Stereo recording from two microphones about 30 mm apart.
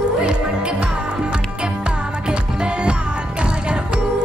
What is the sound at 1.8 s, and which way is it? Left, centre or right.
Music, right.